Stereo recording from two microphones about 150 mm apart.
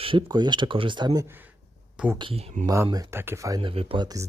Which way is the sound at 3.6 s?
40° right (ahead or behind).